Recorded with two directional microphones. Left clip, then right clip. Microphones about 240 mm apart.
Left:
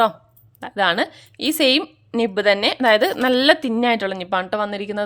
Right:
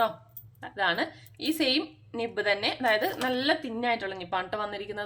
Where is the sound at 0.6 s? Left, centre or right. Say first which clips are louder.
Left 9 dB; left.